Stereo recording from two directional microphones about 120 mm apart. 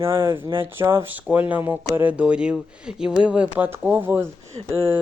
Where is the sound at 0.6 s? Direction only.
20° right (ahead or behind).